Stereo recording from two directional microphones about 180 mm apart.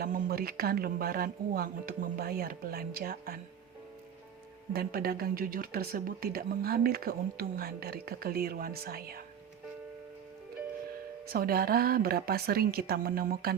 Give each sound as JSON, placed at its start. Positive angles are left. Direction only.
{"t": 0.0, "sound": "speech", "side_deg": -55}
{"t": 4.7, "sound": "speech", "side_deg": -55}
{"t": 11.3, "sound": "speech", "side_deg": -55}